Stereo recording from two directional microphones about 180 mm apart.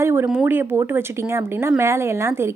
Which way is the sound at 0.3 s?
5° right (ahead or behind).